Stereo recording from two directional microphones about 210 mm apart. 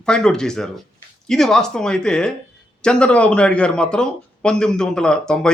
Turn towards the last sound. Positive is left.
turn(degrees=5)  # may be behind; listen again after turning